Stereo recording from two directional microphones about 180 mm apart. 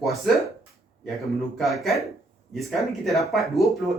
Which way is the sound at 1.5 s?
Centre (ahead or behind).